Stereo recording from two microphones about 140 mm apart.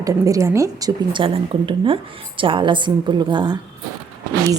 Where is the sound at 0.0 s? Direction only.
25° right (ahead or behind).